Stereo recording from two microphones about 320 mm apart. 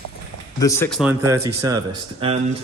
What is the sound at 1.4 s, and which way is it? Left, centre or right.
Speech, centre.